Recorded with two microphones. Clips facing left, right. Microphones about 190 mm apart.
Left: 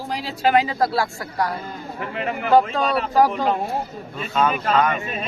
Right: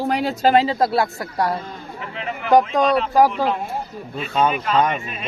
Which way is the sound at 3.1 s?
10° right (ahead or behind).